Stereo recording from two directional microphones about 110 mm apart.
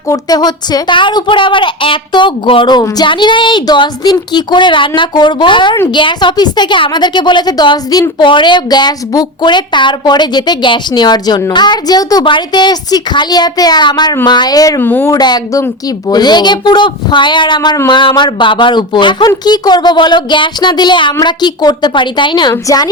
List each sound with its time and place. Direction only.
0.1 s a woman's voice: 35° left (ahead or behind)
14.8 s speech: 20° left (ahead or behind)
15.1 s a woman's voice: 35° left (ahead or behind)